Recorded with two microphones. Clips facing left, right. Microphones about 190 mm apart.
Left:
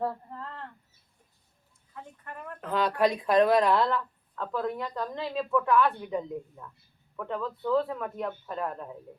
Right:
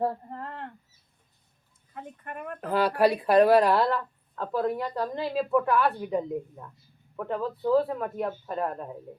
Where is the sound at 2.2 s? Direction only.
60° right (ahead or behind).